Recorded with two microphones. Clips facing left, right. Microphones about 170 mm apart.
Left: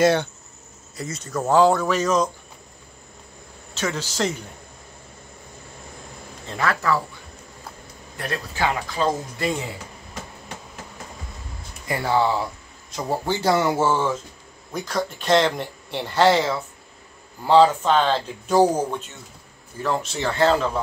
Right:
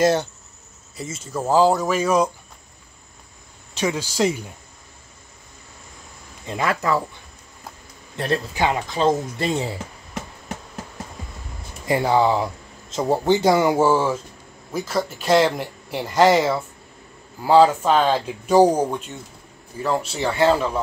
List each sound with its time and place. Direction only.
0.0 s speech: 5° right (ahead or behind)
1.5 s speech: 35° right (ahead or behind)
1.9 s speech: 10° right (ahead or behind)
3.7 s speech: 10° right (ahead or behind)
6.4 s speech: 15° right (ahead or behind)
8.2 s speech: 25° right (ahead or behind)
11.9 s speech: 20° right (ahead or behind)
19.8 s speech: 10° right (ahead or behind)